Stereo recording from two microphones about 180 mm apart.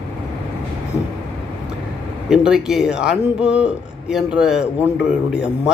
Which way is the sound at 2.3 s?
5° right (ahead or behind).